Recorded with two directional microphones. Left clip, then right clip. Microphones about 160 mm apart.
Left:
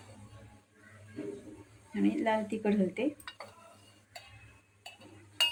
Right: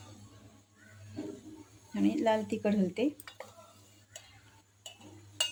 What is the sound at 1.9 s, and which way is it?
Speech, 60° right (ahead or behind).